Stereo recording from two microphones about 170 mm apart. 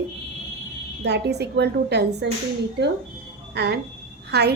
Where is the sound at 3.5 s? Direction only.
80° right.